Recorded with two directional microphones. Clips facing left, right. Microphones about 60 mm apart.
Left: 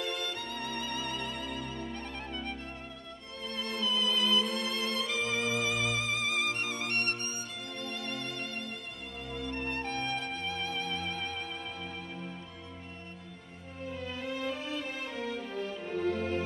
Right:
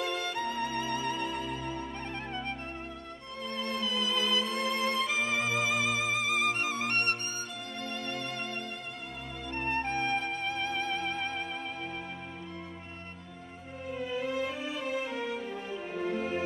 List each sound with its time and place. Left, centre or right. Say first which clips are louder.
0.0 s music: right 4 dB; right
3.4 s music: right 1 dB; right
5.0 s violin: right 2 dB; centre
6.4 s music: right 4 dB; right
6.9 s music: right 2 dB; right
9.5 s music: right 5 dB; right
14.1 s music: right 4 dB; centre